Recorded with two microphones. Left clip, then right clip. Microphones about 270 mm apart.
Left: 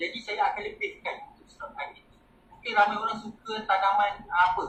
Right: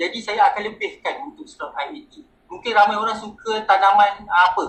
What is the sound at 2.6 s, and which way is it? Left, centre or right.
Speech, right.